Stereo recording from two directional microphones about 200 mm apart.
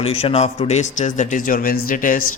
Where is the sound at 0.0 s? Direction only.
30° left (ahead or behind).